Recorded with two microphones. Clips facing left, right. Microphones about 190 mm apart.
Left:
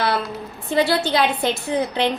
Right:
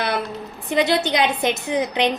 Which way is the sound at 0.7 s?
20° right (ahead or behind).